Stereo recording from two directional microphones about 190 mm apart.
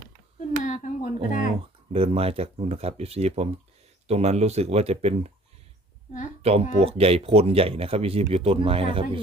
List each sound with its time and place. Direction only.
0.6 s speech: 40° left (ahead or behind)
1.9 s speech: 30° right (ahead or behind)
6.4 s speech: 30° right (ahead or behind)